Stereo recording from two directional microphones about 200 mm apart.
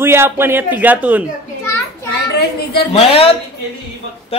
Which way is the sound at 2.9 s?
30° left (ahead or behind).